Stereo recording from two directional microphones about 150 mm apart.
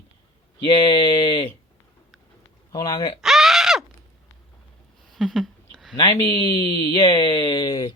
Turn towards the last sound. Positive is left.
turn(degrees=30)  # may be behind; listen again after turning